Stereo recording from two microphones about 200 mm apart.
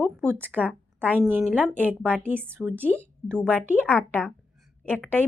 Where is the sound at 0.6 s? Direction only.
10° right (ahead or behind).